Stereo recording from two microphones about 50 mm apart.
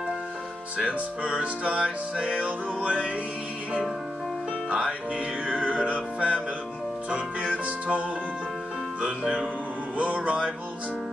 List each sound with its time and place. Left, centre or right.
0.7 s music: right
4.6 s music: right
9.0 s speech: centre
9.9 s music: right